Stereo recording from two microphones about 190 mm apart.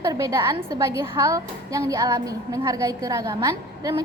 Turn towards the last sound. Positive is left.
turn(degrees=-20)  # may be behind; listen again after turning